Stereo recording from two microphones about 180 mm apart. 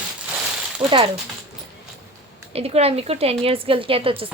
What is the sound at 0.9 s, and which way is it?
Speech, 25° right (ahead or behind).